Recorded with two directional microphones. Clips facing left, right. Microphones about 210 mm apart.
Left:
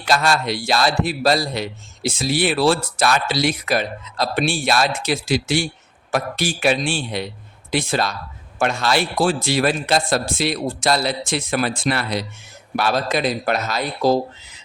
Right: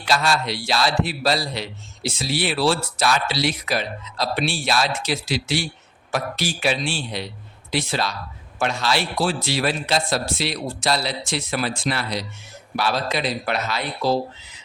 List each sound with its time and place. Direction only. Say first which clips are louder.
0.0 s a man's voice: left 2 dB; 50° left (ahead or behind)